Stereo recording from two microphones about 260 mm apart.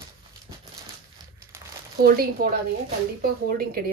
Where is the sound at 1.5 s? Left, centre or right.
Centre.